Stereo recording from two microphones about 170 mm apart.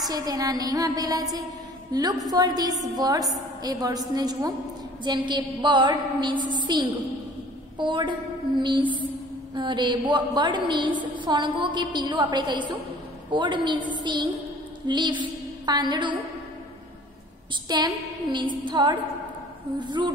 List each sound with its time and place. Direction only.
0.1 s a woman's voice: 20° right (ahead or behind)
14.9 s a sound: 25° right (ahead or behind)
17.7 s a woman's voice: 25° right (ahead or behind)